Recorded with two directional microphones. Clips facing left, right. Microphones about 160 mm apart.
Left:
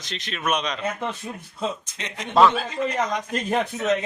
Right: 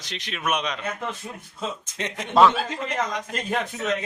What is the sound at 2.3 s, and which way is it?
Speech, centre (ahead or behind).